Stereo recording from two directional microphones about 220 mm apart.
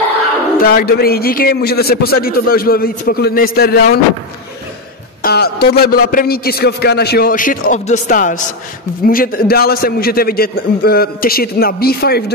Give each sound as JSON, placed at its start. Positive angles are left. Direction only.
{"t": 0.6, "sound": "a man's voice", "side_deg": 40}
{"t": 5.2, "sound": "a man's voice", "side_deg": 45}